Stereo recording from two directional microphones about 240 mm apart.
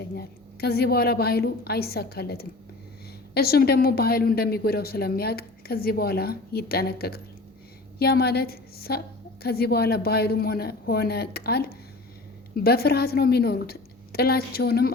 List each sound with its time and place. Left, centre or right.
0.0 s a woman's voice: left